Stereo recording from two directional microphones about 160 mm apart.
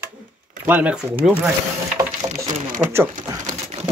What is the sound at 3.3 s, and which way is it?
Pigeon, 20° right (ahead or behind).